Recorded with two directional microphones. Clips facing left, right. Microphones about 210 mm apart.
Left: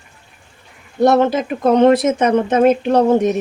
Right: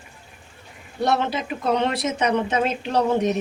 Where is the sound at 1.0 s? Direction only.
45° left (ahead or behind).